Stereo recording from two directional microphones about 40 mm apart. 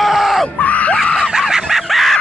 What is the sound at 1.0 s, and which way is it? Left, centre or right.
Screaming, left.